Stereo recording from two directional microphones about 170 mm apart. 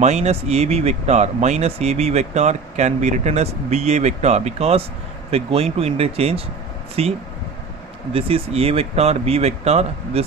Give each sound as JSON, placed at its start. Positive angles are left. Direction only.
{"t": 0.0, "sound": "speech", "side_deg": -40}